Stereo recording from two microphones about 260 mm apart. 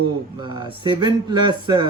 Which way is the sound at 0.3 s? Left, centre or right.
Centre.